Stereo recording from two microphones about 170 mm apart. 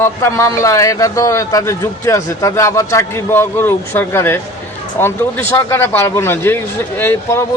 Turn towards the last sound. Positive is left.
turn(degrees=15)  # may be behind; listen again after turning